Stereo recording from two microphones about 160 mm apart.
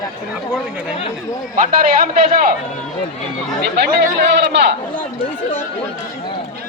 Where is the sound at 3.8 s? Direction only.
85° right.